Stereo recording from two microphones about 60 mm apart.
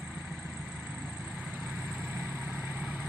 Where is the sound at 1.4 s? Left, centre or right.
Centre.